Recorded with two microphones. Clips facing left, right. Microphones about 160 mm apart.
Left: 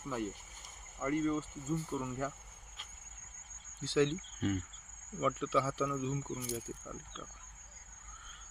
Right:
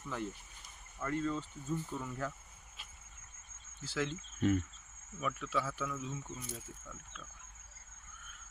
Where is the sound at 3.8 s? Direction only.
25° left (ahead or behind).